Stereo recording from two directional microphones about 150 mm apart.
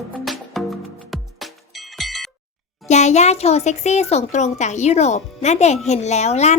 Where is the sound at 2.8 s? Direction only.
50° left (ahead or behind).